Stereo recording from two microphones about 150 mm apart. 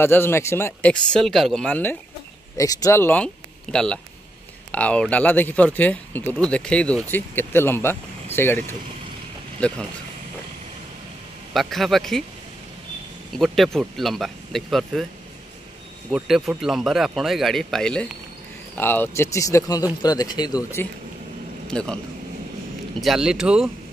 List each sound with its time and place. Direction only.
0.0 s speech: 15° left (ahead or behind)
1.1 s speech: centre (ahead or behind)
2.5 s speech: 25° left (ahead or behind); by 9.8 s 5° left (ahead or behind)
11.5 s speech: centre (ahead or behind)
13.4 s speech: centre (ahead or behind)
16.1 s speech: centre (ahead or behind); by 20.5 s 25° left (ahead or behind)
20.8 s speech: 15° left (ahead or behind)
22.9 s speech: centre (ahead or behind)